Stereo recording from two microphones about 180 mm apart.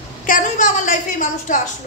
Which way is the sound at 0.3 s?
45° left (ahead or behind).